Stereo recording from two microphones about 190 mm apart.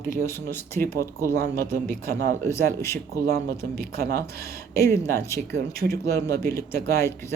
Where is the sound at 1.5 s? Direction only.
50° right (ahead or behind).